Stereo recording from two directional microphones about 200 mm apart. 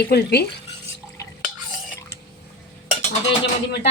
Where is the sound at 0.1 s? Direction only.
55° left (ahead or behind).